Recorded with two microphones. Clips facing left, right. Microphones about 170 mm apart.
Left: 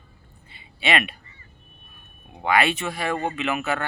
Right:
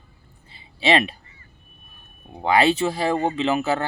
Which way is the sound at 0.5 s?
30° right (ahead or behind).